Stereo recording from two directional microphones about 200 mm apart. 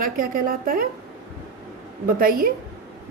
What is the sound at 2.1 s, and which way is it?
Speech, 45° right (ahead or behind).